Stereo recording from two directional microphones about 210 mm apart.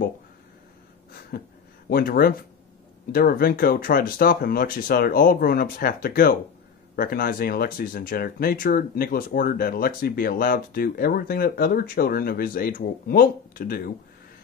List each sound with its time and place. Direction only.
1.3 s speech: 45° left (ahead or behind)